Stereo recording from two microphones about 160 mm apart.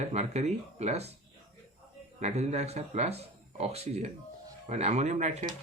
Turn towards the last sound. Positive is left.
turn(degrees=-45)  # may be behind; listen again after turning